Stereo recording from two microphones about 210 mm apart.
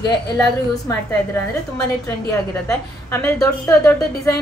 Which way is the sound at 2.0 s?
15° left (ahead or behind).